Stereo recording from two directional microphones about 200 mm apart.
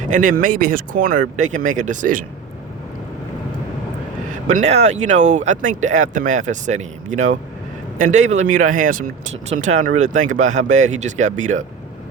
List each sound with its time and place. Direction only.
0.1 s speech: 40° right (ahead or behind)
4.4 s speech: 35° right (ahead or behind)